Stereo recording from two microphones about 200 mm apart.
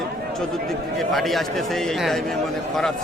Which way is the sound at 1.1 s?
Centre (ahead or behind).